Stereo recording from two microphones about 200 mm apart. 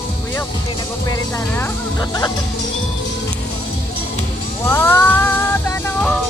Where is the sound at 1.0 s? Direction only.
15° left (ahead or behind).